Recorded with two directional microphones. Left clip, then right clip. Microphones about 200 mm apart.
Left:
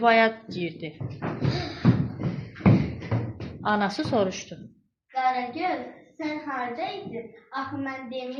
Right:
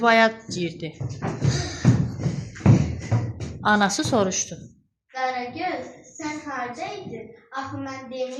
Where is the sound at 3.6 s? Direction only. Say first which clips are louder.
Right 5 dB; 25° right (ahead or behind).